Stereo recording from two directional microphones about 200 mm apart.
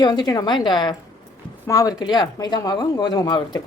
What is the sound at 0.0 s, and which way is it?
Speech, 20° left (ahead or behind).